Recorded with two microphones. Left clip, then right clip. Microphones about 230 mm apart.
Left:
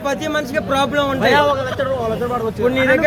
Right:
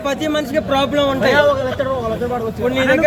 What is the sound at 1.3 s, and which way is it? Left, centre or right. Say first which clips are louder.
Speech: right 1 dB; left.